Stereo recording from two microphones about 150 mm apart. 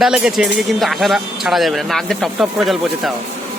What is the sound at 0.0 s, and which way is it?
Speech, 5° right (ahead or behind).